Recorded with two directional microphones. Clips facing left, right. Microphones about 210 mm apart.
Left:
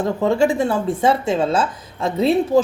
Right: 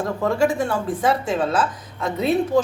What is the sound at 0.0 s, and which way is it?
A woman's voice, 25° left (ahead or behind).